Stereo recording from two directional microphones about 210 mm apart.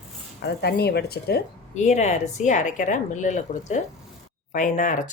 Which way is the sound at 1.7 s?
35° left (ahead or behind).